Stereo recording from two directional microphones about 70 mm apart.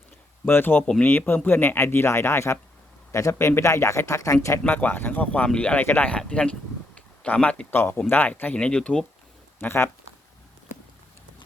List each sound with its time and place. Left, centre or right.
0.4 s a man's voice: left
3.3 s speech: left
3.6 s speech: left
4.6 s speech: left
6.1 s speech: centre
7.7 s speech: left
8.3 s speech: left
9.6 s speech: left